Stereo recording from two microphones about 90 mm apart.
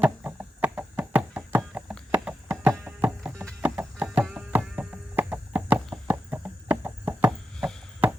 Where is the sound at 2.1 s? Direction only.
15° right (ahead or behind).